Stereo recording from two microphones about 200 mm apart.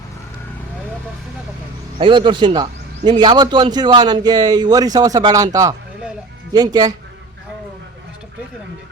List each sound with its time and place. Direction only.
2.0 s a man's voice: 25° right (ahead or behind)